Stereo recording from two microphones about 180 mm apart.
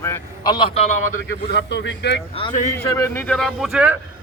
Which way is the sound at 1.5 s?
75° left (ahead or behind).